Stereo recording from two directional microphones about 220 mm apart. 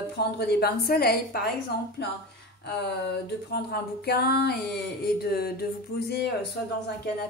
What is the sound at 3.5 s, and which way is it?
Speech, 45° left (ahead or behind).